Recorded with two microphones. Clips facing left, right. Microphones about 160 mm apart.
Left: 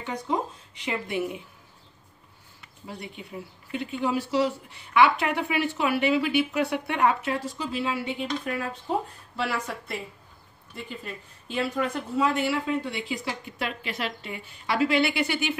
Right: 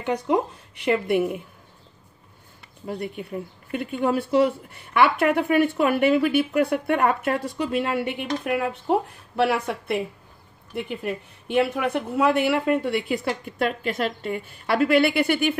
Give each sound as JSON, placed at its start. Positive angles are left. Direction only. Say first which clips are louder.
{"t": 0.0, "sound": "speech", "louder": "right 6 dB", "side_deg": -65}
{"t": 2.9, "sound": "speech", "louder": "right 8 dB", "side_deg": -55}